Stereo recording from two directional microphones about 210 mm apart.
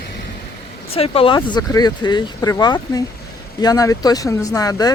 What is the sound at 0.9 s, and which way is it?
Speech, 25° left (ahead or behind).